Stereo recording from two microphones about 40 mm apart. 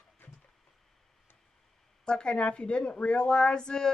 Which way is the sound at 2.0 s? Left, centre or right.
Left.